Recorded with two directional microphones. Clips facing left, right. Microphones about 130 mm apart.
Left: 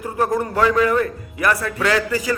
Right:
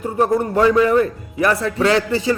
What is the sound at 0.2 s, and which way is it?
A man's voice, 30° right (ahead or behind).